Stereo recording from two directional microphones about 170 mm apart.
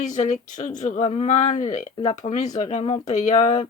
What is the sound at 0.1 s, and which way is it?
Speech, 40° left (ahead or behind).